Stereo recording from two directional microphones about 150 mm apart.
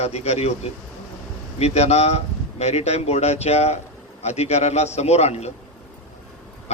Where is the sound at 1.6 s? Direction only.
45° left (ahead or behind).